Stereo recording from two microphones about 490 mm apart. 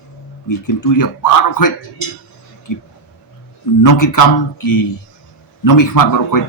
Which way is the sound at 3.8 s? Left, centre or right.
Left.